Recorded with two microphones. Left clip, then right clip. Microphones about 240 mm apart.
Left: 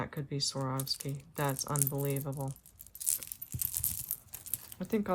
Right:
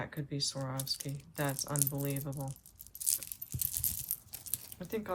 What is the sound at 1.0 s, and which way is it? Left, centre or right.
Speech, centre.